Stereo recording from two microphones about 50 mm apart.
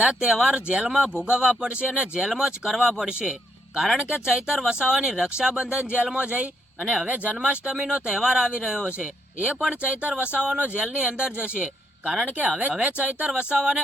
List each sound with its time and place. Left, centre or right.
0.0 s speech: centre
0.3 s speech: centre
0.5 s speech: right
7.1 s speech: right